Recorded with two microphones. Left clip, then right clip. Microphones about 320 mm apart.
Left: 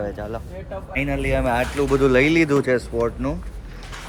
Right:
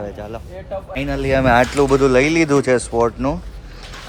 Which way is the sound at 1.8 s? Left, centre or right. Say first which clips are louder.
Right 3 dB; centre.